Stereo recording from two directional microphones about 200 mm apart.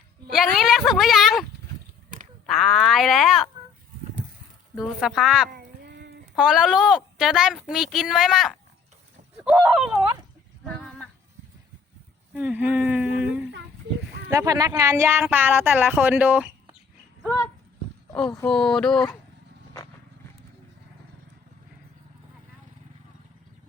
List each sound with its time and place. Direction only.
0.3 s speech: centre (ahead or behind)
2.5 s speech: centre (ahead or behind)
4.7 s speech: centre (ahead or behind)
5.5 s a sound: 50° right (ahead or behind)
6.3 s speech: 5° right (ahead or behind)
10.8 s a sound: 5° left (ahead or behind)
12.3 s a sound: 5° right (ahead or behind)
14.3 s speech: 15° right (ahead or behind)
18.4 s speech: 5° left (ahead or behind)